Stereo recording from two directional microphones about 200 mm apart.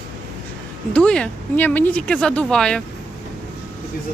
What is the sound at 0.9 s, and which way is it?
Speech, 5° left (ahead or behind).